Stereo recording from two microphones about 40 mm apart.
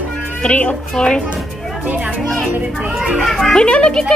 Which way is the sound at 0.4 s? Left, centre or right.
Left.